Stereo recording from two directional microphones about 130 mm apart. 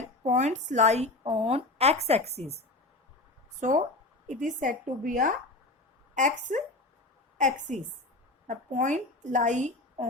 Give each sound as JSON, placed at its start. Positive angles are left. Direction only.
{"t": 0.3, "sound": "a woman's voice", "side_deg": -60}
{"t": 4.3, "sound": "a woman's voice", "side_deg": -75}
{"t": 6.1, "sound": "a woman's voice", "side_deg": -70}